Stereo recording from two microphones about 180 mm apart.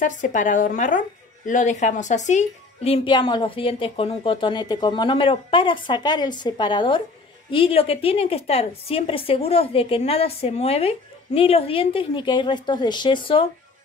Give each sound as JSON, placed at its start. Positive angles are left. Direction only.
{"t": 0.0, "sound": "a woman's voice", "side_deg": 45}